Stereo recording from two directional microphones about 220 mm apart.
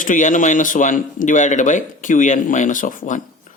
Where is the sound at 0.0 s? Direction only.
35° left (ahead or behind).